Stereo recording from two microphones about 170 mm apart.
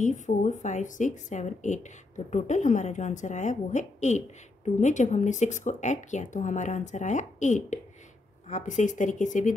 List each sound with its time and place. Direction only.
0.0 s speech: 45° left (ahead or behind)